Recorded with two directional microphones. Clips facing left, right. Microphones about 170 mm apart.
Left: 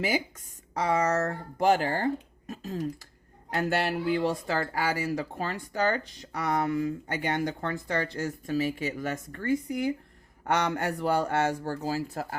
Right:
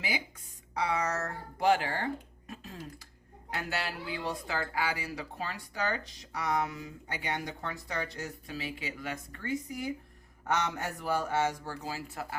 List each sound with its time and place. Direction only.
0.7 s speech: 45° left (ahead or behind); by 11.5 s 60° left (ahead or behind)
11.6 s speech: 45° left (ahead or behind)